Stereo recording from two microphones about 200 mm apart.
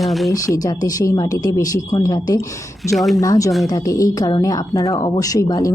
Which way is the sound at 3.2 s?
15° left (ahead or behind).